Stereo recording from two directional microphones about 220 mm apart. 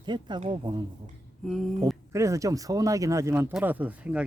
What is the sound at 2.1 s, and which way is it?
Speech, 15° right (ahead or behind).